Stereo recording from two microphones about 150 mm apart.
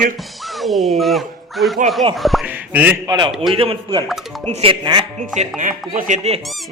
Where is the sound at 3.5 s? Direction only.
35° right (ahead or behind).